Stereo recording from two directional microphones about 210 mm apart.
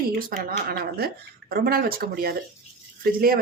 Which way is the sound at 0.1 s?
45° right (ahead or behind).